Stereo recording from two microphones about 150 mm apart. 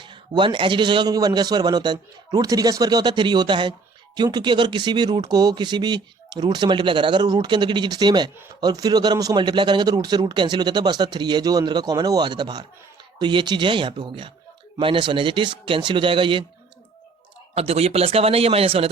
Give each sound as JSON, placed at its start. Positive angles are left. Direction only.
{"t": 0.0, "sound": "a man's voice", "side_deg": -35}
{"t": 17.5, "sound": "a man's voice", "side_deg": -45}